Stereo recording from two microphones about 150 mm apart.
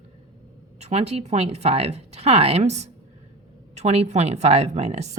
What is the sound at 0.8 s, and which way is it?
Speech, 45° right (ahead or behind).